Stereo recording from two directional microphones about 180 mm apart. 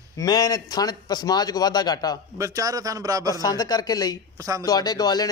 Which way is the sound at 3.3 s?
20° left (ahead or behind).